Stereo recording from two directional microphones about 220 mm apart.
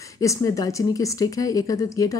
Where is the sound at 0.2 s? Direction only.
15° left (ahead or behind).